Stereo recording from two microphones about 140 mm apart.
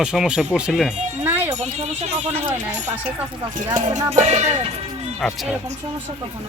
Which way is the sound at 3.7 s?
25° right (ahead or behind).